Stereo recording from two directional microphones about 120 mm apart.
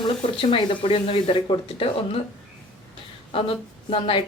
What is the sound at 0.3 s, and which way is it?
A woman's voice, 45° left (ahead or behind).